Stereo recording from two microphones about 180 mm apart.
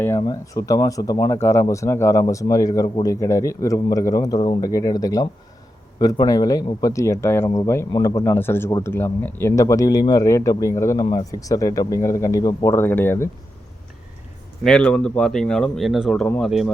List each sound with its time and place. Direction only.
0.2 s a man's voice: 20° left (ahead or behind)
14.6 s speech: 5° left (ahead or behind)